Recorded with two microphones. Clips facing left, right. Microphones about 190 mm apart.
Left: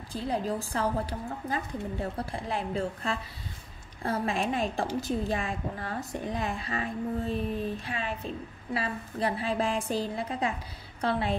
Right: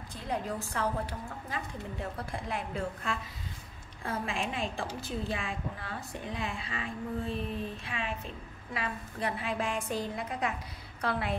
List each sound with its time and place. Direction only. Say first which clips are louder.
0.1 s a woman's voice: left 5 dB; 30° left (ahead or behind)